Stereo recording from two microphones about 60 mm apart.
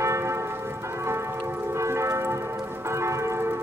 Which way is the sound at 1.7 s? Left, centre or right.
Right.